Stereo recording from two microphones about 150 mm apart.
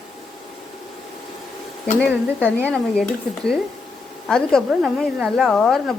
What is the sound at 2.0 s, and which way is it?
Speech, 10° left (ahead or behind).